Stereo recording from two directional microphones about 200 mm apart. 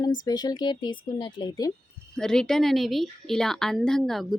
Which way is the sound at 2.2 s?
5° left (ahead or behind).